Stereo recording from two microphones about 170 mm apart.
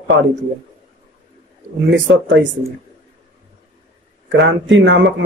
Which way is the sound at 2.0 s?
90° right.